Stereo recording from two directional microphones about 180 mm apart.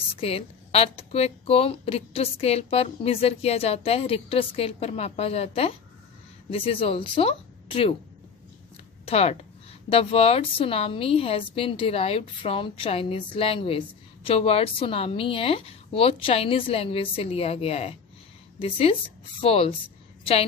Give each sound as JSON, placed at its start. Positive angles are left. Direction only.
{"t": 0.1, "sound": "a woman's voice", "side_deg": 30}
{"t": 9.0, "sound": "a woman's voice", "side_deg": 35}